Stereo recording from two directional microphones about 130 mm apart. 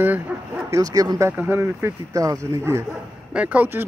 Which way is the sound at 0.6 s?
25° right (ahead or behind).